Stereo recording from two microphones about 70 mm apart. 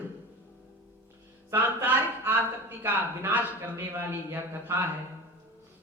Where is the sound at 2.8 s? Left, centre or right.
Right.